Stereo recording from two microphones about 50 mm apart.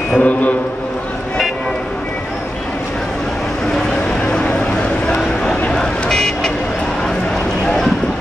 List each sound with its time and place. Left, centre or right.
0.2 s a man's voice: left
5.0 s vehicle: centre